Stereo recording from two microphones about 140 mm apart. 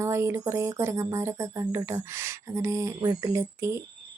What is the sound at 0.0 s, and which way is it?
Speech, 20° right (ahead or behind).